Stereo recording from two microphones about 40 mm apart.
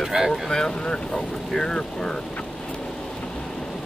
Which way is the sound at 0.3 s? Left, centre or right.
Centre.